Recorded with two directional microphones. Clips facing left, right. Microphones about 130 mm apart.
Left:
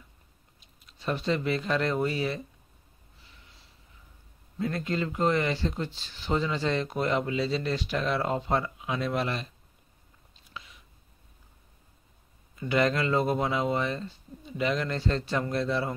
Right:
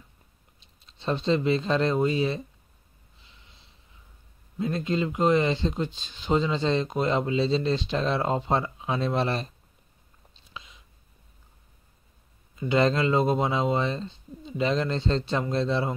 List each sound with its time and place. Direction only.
0.6 s speech: 25° right (ahead or behind)
3.2 s snort: 20° right (ahead or behind)
4.6 s speech: 20° right (ahead or behind)
10.3 s a sound: 20° right (ahead or behind)
12.5 s speech: 25° right (ahead or behind)